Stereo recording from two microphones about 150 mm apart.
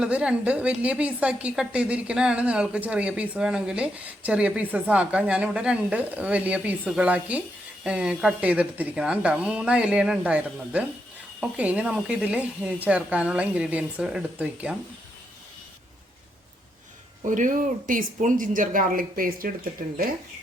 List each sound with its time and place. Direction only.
0.0 s a woman's voice: 5° right (ahead or behind)
17.2 s speech: 60° right (ahead or behind)